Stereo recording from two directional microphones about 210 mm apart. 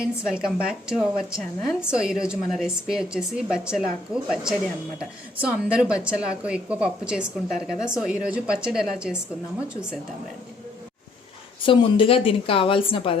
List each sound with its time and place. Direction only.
0.0 s a woman's voice: 5° right (ahead or behind)
11.6 s a woman's voice: 25° left (ahead or behind)